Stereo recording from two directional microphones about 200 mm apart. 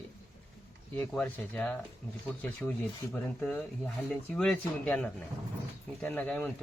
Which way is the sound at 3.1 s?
5° left (ahead or behind).